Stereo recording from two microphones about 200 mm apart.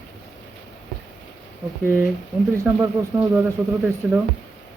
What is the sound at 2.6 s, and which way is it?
Speech, 15° right (ahead or behind).